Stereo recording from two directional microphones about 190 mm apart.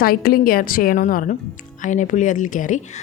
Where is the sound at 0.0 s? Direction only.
50° left (ahead or behind).